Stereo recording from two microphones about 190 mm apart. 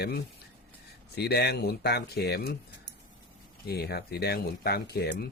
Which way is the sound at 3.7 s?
55° left (ahead or behind).